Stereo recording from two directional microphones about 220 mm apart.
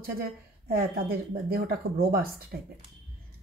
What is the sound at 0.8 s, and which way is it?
Speech, 45° right (ahead or behind).